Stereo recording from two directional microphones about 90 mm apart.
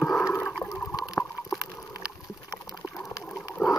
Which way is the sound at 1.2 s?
20° left (ahead or behind).